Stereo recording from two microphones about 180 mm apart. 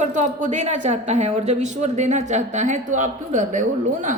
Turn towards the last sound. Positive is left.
turn(degrees=-45)  # may be behind; listen again after turning